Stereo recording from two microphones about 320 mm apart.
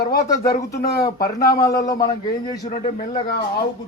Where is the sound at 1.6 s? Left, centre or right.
Centre.